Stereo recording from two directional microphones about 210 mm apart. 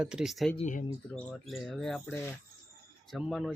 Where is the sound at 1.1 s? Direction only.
5° left (ahead or behind).